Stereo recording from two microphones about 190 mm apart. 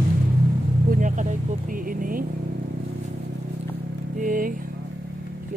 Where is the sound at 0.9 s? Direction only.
45° right (ahead or behind).